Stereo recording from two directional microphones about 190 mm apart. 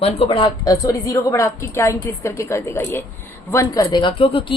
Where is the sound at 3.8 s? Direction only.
25° left (ahead or behind).